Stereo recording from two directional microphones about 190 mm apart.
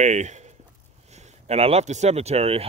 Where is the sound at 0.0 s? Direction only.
40° right (ahead or behind).